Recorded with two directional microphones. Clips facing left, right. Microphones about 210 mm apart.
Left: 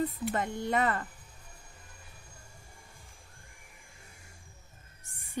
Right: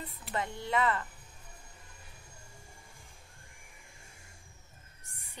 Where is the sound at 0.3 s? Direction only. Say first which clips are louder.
Left 3 dB; 50° left (ahead or behind).